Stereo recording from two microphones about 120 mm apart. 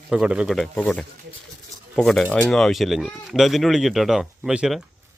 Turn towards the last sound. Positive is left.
turn(degrees=-5)  # may be behind; listen again after turning